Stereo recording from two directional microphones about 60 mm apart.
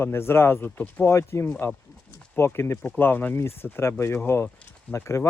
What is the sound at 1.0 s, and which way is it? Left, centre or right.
Speech, left.